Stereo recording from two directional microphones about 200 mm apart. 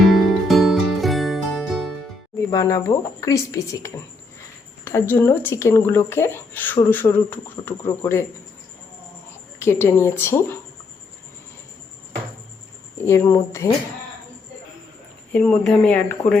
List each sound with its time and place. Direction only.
0.0 s music: centre (ahead or behind)
2.5 s speech: 15° left (ahead or behind)
9.6 s speech: 15° left (ahead or behind)
13.0 s speech: 15° left (ahead or behind)
15.3 s speech: 5° left (ahead or behind)